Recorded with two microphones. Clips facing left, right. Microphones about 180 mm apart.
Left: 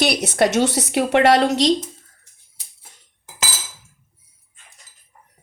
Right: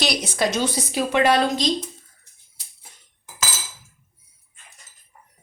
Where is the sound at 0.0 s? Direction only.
65° left (ahead or behind).